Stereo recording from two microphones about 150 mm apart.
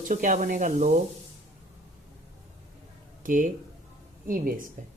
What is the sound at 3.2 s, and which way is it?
Speech, 65° right (ahead or behind).